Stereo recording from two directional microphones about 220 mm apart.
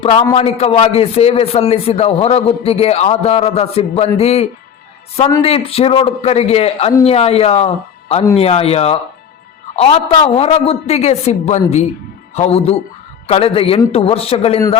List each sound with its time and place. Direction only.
0.0 s a man's voice: 25° left (ahead or behind)